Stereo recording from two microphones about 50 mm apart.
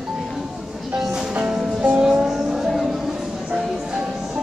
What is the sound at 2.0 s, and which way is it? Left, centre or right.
Music, centre.